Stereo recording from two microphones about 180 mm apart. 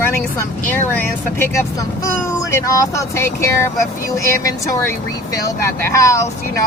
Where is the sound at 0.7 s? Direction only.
10° left (ahead or behind).